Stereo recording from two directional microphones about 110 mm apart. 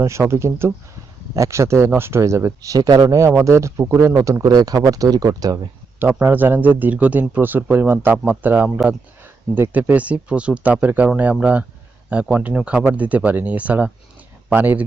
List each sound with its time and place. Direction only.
0.0 s speech: 25° right (ahead or behind)
3.1 s speech: 25° right (ahead or behind)
6.0 s speech: 20° right (ahead or behind)